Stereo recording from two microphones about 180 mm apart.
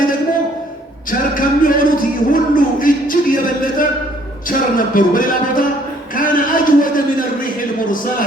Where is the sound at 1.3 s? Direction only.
50° left (ahead or behind).